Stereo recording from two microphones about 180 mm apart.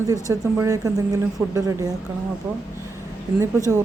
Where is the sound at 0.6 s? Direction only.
15° right (ahead or behind).